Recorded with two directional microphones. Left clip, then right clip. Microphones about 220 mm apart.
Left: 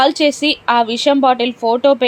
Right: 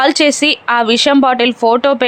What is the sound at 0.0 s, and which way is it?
Speech, 20° right (ahead or behind).